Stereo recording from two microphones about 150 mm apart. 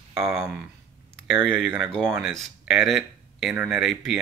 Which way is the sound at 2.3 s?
Centre (ahead or behind).